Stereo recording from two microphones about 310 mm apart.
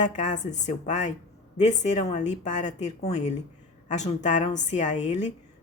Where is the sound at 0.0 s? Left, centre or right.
Left.